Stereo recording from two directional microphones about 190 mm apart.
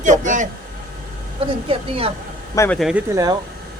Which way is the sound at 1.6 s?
30° right (ahead or behind).